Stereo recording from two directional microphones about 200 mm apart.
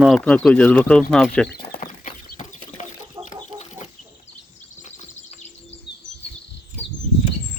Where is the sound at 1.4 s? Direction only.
50° left (ahead or behind).